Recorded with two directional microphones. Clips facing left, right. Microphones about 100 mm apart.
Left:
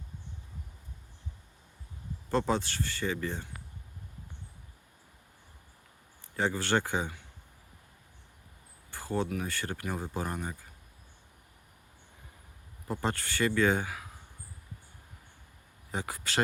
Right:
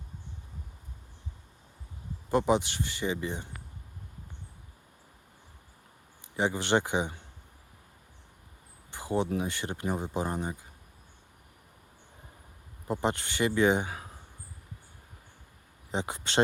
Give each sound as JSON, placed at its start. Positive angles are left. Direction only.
{"t": 2.3, "sound": "speech", "side_deg": -15}
{"t": 6.3, "sound": "speech", "side_deg": -20}
{"t": 8.9, "sound": "a sound", "side_deg": -20}
{"t": 9.4, "sound": "speech", "side_deg": -20}
{"t": 12.9, "sound": "speech", "side_deg": -20}
{"t": 15.9, "sound": "speech", "side_deg": -20}